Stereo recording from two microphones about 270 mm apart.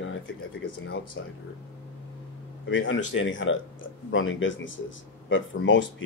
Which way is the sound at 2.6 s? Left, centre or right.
Left.